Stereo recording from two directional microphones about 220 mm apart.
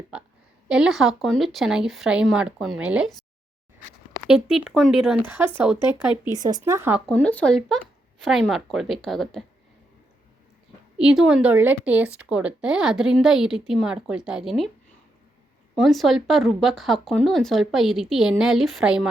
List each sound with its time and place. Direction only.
0.7 s speech: 5° right (ahead or behind)
4.3 s speech: 5° right (ahead or behind)
6.1 s speech: 15° left (ahead or behind)
6.4 s speech: 15° right (ahead or behind)
7.1 s speech: 5° left (ahead or behind)
10.9 s speech: 5° right (ahead or behind)
15.8 s speech: centre (ahead or behind)